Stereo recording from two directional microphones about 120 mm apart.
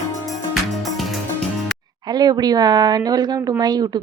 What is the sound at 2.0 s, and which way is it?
A woman's voice, 35° right (ahead or behind).